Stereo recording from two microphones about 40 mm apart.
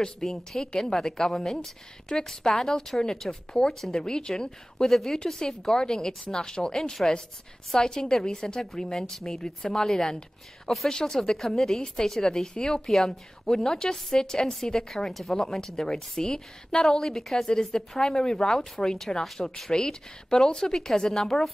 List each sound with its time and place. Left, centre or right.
0.2 s a woman's voice: centre
4.8 s a woman's voice: centre
17.0 s a woman's voice: centre
19.2 s a woman's voice: centre